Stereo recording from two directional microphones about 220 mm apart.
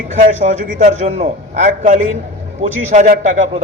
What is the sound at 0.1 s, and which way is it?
A man's voice, 35° right (ahead or behind).